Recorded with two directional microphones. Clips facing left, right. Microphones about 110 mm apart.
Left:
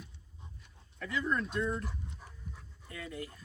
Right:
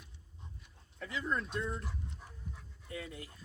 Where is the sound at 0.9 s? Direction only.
25° right (ahead or behind).